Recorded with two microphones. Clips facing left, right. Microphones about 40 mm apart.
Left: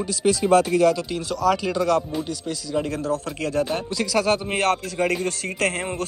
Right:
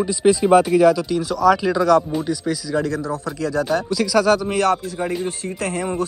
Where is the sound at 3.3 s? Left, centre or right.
Left.